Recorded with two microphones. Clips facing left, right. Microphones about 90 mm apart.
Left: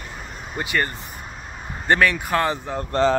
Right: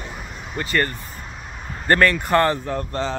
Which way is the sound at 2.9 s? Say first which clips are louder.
Left 11 dB; 50° left (ahead or behind).